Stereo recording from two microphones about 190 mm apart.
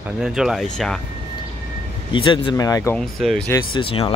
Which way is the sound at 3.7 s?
30° left (ahead or behind).